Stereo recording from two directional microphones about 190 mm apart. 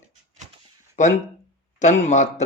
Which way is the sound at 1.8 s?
40° left (ahead or behind).